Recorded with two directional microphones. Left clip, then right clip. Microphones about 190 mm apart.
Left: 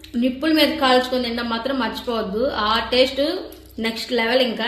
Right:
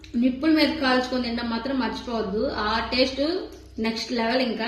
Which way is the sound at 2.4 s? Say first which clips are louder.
Left 5 dB; 50° left (ahead or behind).